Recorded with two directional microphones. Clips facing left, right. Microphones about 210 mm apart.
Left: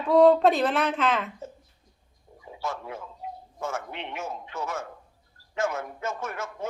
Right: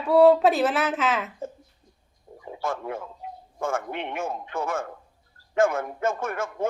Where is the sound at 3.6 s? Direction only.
50° right (ahead or behind).